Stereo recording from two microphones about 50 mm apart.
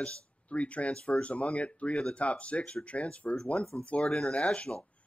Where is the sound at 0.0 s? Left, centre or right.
Left.